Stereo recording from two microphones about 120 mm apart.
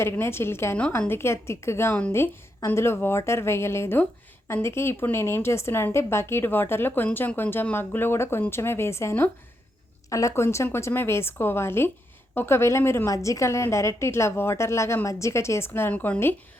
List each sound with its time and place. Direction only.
0.0 s a woman's voice: 20° left (ahead or behind)